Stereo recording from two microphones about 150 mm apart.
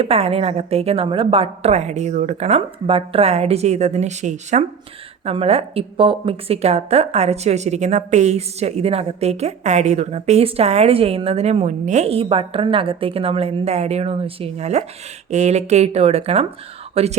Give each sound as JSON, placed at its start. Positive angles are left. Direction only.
{"t": 0.0, "sound": "speech", "side_deg": -40}
{"t": 2.6, "sound": "speech", "side_deg": -40}
{"t": 5.2, "sound": "speech", "side_deg": -40}